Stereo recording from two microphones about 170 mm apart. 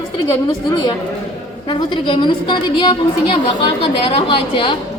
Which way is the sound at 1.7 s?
30° left (ahead or behind).